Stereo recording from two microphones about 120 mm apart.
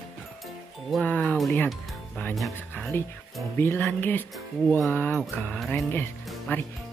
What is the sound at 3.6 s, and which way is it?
Speech, 15° left (ahead or behind).